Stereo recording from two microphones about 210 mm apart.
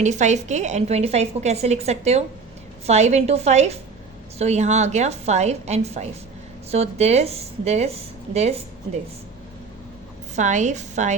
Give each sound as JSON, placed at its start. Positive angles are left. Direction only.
{"t": 0.0, "sound": "a woman's voice", "side_deg": -35}
{"t": 10.3, "sound": "a woman's voice", "side_deg": -35}